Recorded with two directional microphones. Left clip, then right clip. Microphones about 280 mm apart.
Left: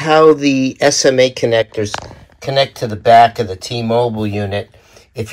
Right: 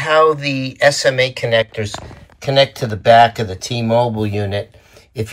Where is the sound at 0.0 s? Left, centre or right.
Left.